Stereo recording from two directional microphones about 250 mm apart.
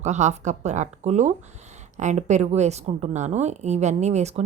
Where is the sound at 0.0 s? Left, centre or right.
Right.